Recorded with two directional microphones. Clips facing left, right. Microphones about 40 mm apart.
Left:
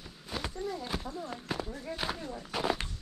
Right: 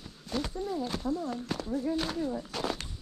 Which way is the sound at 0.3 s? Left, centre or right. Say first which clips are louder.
Right 3 dB; centre.